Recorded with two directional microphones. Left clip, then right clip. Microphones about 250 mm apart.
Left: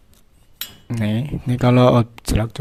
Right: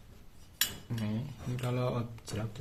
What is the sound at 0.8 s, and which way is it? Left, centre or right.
Cutlery, left.